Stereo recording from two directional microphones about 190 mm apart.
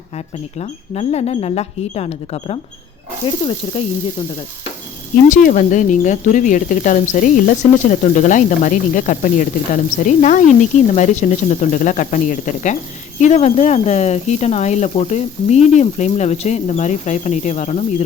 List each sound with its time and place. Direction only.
0.6 s speech: 35° left (ahead or behind)
5.3 s speech: 45° left (ahead or behind)